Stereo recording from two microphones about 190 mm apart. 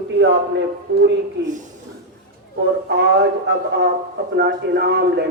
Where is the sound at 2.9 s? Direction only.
65° right (ahead or behind).